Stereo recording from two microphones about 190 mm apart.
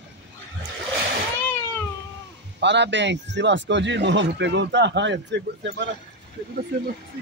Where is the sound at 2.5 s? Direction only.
65° right (ahead or behind).